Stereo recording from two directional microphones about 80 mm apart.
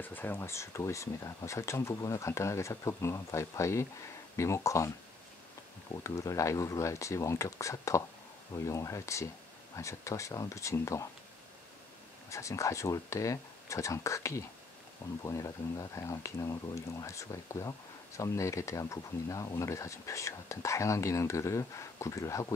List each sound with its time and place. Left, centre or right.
0.0 s speech: left
6.0 s speech: left
12.3 s speech: left